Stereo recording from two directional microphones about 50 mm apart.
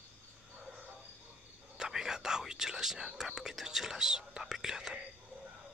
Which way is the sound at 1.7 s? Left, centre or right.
Centre.